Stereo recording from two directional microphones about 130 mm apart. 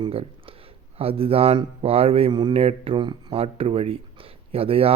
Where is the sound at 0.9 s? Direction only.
45° right (ahead or behind).